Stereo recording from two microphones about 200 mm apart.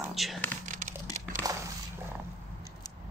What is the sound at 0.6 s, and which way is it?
Crumpling, 40° right (ahead or behind).